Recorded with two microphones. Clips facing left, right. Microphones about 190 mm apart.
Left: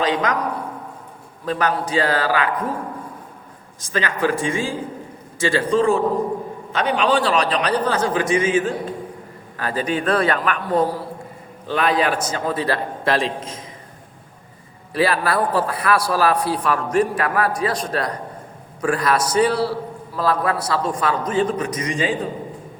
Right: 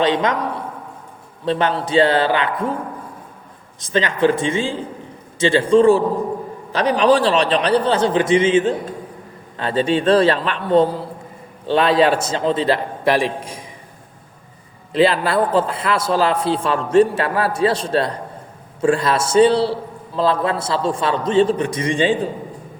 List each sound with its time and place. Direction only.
0.0 s a man's voice: 25° right (ahead or behind)
1.5 s a man's voice: 25° right (ahead or behind)
3.9 s a man's voice: 25° right (ahead or behind)
14.9 s a man's voice: 25° right (ahead or behind)